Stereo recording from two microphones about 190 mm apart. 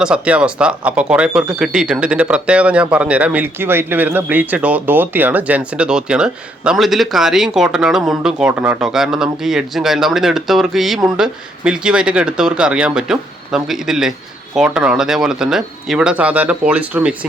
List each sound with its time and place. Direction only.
0.0 s speech: 5° right (ahead or behind)